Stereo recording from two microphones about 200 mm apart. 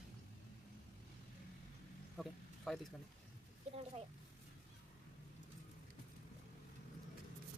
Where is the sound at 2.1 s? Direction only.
Centre (ahead or behind).